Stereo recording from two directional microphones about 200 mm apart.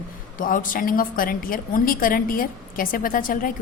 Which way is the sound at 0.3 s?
45° left (ahead or behind).